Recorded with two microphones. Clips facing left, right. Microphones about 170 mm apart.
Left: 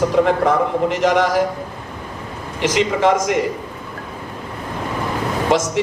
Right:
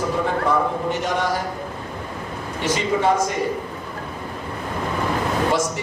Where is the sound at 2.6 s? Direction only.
90° left.